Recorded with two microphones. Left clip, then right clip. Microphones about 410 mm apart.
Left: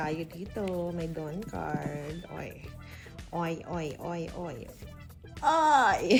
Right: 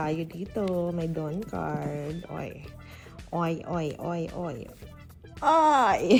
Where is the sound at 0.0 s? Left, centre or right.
Right.